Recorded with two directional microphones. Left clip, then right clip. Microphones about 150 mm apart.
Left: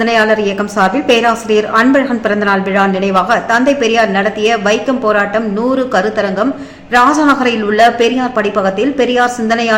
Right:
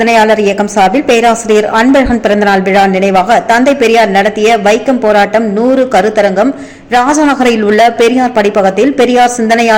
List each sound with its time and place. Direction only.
0.0 s a woman's voice: 25° right (ahead or behind)